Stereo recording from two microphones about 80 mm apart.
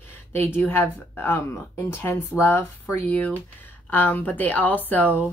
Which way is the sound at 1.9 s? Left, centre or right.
Left.